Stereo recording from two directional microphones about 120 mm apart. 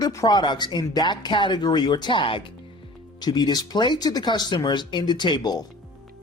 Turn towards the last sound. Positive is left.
turn(degrees=35)  # may be behind; listen again after turning